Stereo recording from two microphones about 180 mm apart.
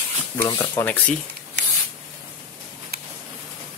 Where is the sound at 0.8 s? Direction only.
10° left (ahead or behind).